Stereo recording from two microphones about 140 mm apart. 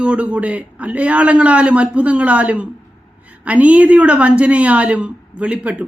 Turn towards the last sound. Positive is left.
turn(degrees=-10)  # may be behind; listen again after turning